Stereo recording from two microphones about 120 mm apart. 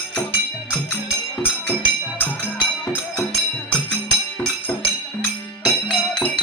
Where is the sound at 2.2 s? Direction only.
15° left (ahead or behind).